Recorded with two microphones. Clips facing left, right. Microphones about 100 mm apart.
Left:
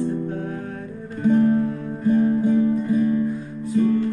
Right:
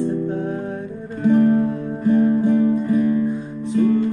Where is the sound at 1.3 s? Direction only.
45° right (ahead or behind).